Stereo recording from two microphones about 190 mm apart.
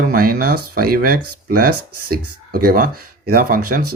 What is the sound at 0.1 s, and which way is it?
Speech, 50° right (ahead or behind).